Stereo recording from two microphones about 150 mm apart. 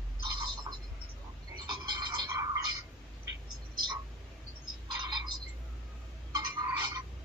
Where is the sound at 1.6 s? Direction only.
25° right (ahead or behind).